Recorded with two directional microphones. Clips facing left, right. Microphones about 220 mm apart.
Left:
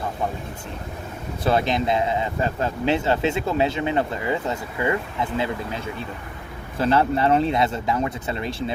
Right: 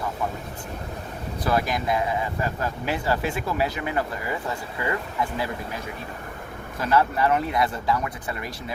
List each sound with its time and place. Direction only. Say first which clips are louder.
1.5 s speech: left 3 dB; 25° left (ahead or behind)